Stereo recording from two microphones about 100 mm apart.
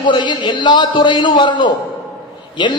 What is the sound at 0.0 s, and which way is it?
A man's voice, 50° left (ahead or behind).